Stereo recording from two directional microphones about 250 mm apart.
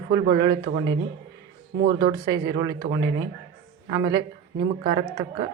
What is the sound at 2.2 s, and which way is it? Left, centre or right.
Speech, centre.